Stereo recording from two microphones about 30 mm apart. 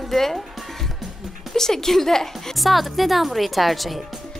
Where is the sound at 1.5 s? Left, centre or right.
Centre.